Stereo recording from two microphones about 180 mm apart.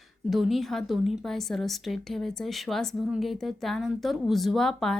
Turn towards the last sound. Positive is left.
turn(degrees=0)  # may be behind; listen again after turning